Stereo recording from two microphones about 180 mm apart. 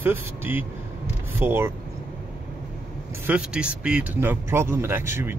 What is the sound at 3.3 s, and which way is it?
Speech, 5° right (ahead or behind).